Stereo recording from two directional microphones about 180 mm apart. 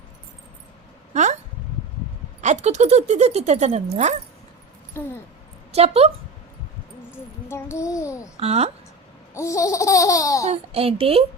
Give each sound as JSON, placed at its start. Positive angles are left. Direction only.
{"t": 1.1, "sound": "a sound", "side_deg": -40}
{"t": 2.4, "sound": "speech", "side_deg": -40}
{"t": 4.9, "sound": "laughter", "side_deg": 15}
{"t": 5.7, "sound": "speech", "side_deg": -35}
{"t": 7.4, "sound": "a child's voice", "side_deg": 15}
{"t": 8.4, "sound": "speech", "side_deg": -35}
{"t": 9.3, "sound": "laughter", "side_deg": 15}
{"t": 10.5, "sound": "speech", "side_deg": -35}